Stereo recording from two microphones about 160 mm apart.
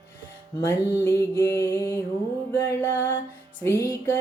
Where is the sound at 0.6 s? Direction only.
15° left (ahead or behind).